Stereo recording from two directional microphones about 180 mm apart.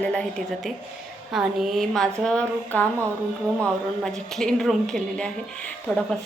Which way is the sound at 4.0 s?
Centre (ahead or behind).